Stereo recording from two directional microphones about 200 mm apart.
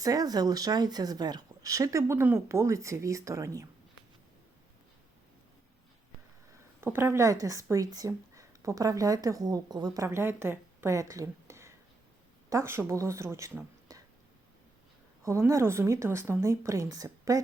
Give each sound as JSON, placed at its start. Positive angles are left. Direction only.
{"t": 0.0, "sound": "speech", "side_deg": -20}
{"t": 6.8, "sound": "speech", "side_deg": -10}
{"t": 15.2, "sound": "speech", "side_deg": -15}